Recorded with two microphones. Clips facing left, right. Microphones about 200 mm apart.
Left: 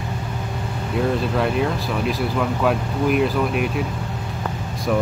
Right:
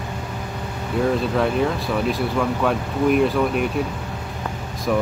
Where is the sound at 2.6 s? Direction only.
5° left (ahead or behind).